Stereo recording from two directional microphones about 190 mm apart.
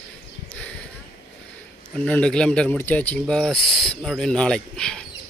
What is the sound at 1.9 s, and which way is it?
Speech, 5° left (ahead or behind).